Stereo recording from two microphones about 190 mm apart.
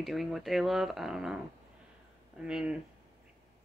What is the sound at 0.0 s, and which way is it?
Speech, centre (ahead or behind).